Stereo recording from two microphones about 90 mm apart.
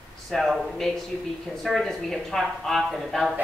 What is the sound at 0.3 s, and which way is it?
A woman's voice, centre (ahead or behind).